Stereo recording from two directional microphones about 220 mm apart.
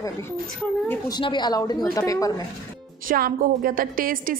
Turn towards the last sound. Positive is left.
turn(degrees=-40)  # may be behind; listen again after turning